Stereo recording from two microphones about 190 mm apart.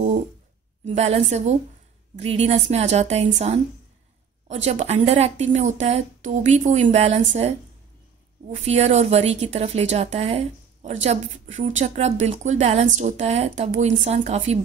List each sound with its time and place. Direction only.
0.8 s a woman's voice: 35° right (ahead or behind)